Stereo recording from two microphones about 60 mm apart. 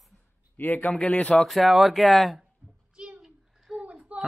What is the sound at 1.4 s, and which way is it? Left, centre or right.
Speech, centre.